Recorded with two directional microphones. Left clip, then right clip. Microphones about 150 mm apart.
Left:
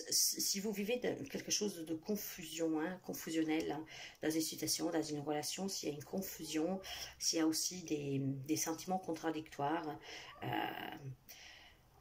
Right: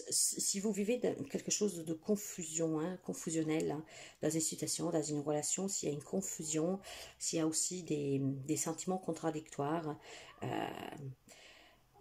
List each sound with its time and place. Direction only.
0.1 s speech: 25° right (ahead or behind)